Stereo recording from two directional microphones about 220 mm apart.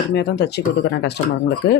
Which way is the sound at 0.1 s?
50° left (ahead or behind).